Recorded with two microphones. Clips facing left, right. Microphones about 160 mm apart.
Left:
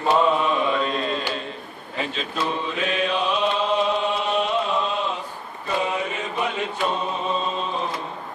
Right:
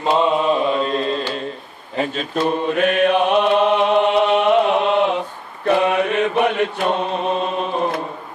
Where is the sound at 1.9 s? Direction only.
45° right (ahead or behind).